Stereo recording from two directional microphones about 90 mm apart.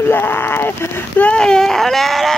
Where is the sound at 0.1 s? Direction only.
20° left (ahead or behind).